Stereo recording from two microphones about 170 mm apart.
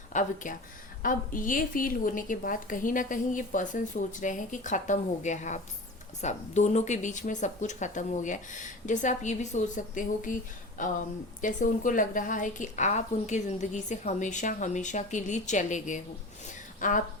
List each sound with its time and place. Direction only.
0.1 s a woman's voice: 45° left (ahead or behind)